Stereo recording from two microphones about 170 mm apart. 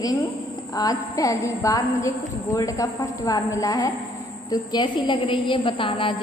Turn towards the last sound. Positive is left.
turn(degrees=30)  # may be behind; listen again after turning